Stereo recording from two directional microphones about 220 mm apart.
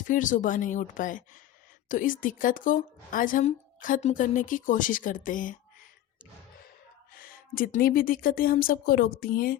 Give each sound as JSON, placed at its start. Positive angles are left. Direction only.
{"t": 0.1, "sound": "a woman's voice", "side_deg": 35}
{"t": 7.5, "sound": "a woman's voice", "side_deg": 40}